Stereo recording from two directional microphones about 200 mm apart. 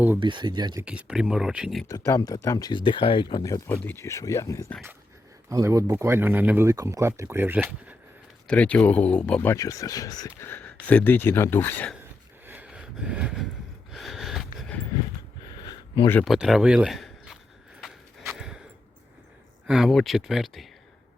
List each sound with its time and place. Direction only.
0.2 s speech: 25° right (ahead or behind)
0.9 s speech: 5° right (ahead or behind)
1.9 s speech: 15° left (ahead or behind)
5.5 s speech: 15° right (ahead or behind)
8.4 s speech: 5° left (ahead or behind)
12.5 s gasp: 5° right (ahead or behind)
13.9 s snort: centre (ahead or behind)
15.6 s a sound: 20° left (ahead or behind)
16.0 s speech: 10° left (ahead or behind)
16.3 s speech: 5° right (ahead or behind)
17.7 s a sound: centre (ahead or behind)
19.6 s speech: centre (ahead or behind)